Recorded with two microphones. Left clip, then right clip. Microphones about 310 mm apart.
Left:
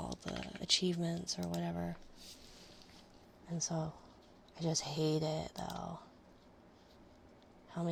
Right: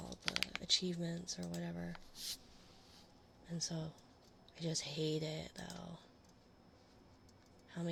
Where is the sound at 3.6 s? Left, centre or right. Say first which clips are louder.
Left 5 dB; centre.